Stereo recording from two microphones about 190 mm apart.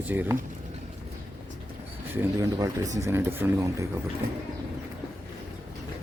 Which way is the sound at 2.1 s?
20° right (ahead or behind).